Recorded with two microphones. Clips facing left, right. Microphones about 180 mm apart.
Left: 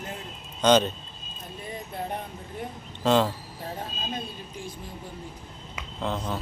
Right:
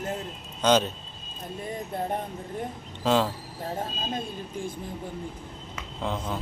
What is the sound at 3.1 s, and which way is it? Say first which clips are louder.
Speech: left 2 dB; 5° right (ahead or behind).